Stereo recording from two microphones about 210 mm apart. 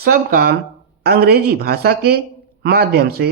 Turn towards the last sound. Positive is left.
turn(degrees=-50)  # may be behind; listen again after turning